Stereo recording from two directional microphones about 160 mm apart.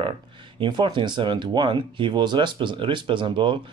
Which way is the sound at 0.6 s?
30° right (ahead or behind).